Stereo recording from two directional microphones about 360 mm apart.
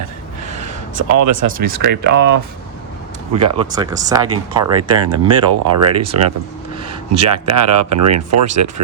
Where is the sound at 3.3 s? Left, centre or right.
Centre.